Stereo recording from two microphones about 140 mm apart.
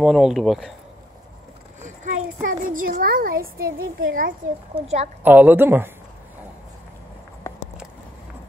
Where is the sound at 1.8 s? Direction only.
65° right (ahead or behind); by 4.3 s 85° right.